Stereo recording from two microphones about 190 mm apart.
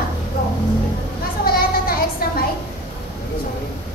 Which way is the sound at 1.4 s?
50° left (ahead or behind).